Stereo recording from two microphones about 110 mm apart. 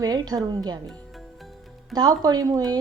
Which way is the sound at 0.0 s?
35° right (ahead or behind).